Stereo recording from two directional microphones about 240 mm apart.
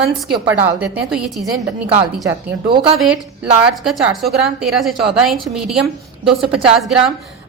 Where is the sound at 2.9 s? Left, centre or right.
Centre.